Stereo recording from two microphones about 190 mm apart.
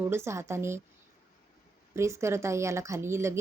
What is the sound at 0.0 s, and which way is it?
Speech, 15° right (ahead or behind).